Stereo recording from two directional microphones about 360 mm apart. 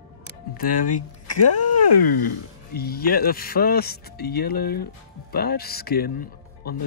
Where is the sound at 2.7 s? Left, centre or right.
Left.